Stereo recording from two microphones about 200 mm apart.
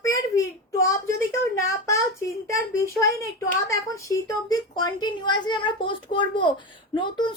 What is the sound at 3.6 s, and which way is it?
A woman's voice, 15° left (ahead or behind).